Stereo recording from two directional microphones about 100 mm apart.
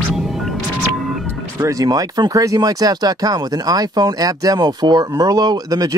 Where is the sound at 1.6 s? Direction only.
35° right (ahead or behind).